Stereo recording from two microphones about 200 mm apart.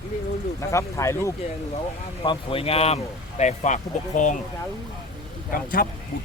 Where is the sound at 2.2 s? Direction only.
25° left (ahead or behind).